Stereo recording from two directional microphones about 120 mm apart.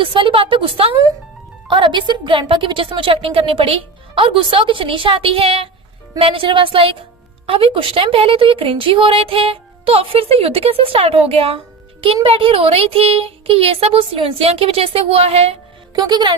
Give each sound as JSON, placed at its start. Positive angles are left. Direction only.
{"t": 0.0, "sound": "a woman's voice", "side_deg": -45}
{"t": 16.0, "sound": "a woman's voice", "side_deg": -35}